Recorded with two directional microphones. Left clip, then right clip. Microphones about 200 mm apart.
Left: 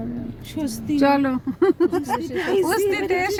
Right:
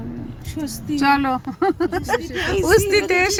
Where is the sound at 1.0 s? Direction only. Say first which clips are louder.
Right 2 dB; 5° right (ahead or behind).